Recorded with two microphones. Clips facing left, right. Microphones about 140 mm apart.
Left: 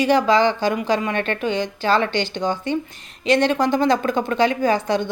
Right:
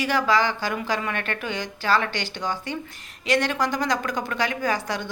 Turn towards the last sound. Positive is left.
turn(degrees=25)  # may be behind; listen again after turning